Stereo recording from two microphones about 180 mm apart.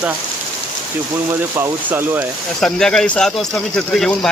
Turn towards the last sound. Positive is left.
turn(degrees=5)  # may be behind; listen again after turning